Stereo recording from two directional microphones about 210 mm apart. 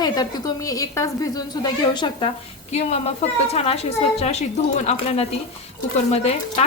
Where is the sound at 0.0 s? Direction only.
20° left (ahead or behind).